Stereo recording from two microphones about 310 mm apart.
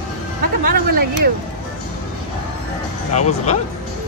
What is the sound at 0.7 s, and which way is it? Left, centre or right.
Speech, right.